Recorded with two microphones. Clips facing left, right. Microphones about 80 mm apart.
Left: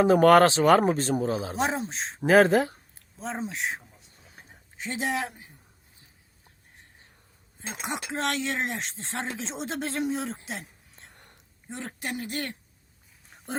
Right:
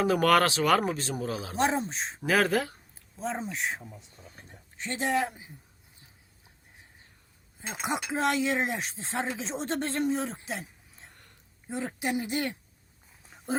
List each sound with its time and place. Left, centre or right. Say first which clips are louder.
0.0 s speech: left 6 dB; left
1.5 s speech: right 1 dB; centre
2.2 s speech: left 7 dB; left
2.9 s speech: right 1 dB; centre
4.4 s a sound: left 2 dB; centre
7.7 s speech: right 2 dB; centre
13.3 s dog: right 4 dB; centre